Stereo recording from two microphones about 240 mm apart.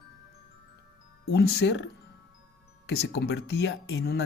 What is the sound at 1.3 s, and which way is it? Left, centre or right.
Speech, left.